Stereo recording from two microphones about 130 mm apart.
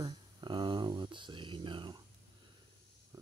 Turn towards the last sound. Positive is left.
turn(degrees=-30)  # may be behind; listen again after turning